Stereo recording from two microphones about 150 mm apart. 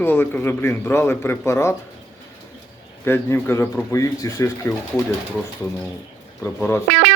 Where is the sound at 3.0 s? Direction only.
15° left (ahead or behind).